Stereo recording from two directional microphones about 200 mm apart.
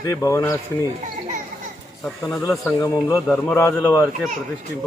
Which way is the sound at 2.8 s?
15° left (ahead or behind).